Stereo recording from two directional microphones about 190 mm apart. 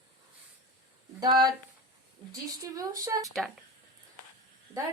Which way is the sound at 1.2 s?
20° right (ahead or behind).